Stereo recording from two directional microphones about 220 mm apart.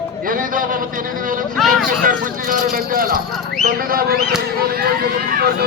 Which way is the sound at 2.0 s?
40° right (ahead or behind).